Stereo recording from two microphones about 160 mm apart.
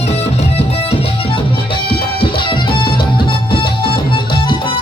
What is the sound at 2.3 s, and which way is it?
Music, 30° left (ahead or behind).